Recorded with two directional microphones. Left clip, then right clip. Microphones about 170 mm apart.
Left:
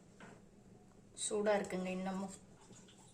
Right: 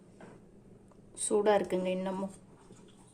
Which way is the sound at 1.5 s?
50° right (ahead or behind).